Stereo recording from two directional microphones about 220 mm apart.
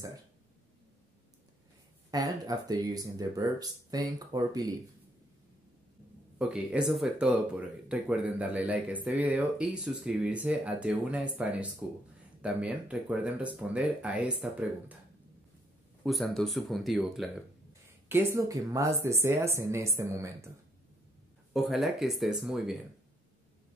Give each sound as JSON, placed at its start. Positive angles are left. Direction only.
{"t": 2.0, "sound": "speech", "side_deg": -15}
{"t": 6.3, "sound": "speech", "side_deg": -5}
{"t": 16.0, "sound": "speech", "side_deg": 0}
{"t": 18.0, "sound": "speech", "side_deg": -10}
{"t": 21.5, "sound": "speech", "side_deg": 0}